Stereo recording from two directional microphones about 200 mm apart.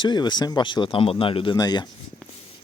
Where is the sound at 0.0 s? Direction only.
20° left (ahead or behind).